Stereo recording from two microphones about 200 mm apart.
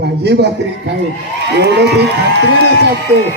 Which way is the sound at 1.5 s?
55° right (ahead or behind).